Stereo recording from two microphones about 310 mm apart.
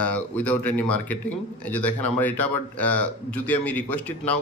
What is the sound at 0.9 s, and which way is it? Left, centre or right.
Speech, left.